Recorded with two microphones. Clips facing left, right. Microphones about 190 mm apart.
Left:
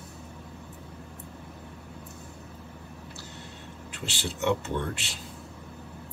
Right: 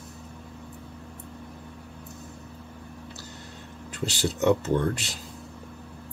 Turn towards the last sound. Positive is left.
turn(degrees=-40)  # may be behind; listen again after turning